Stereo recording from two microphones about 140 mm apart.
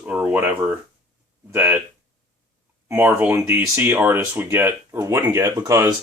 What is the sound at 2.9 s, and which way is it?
Speech, 10° right (ahead or behind).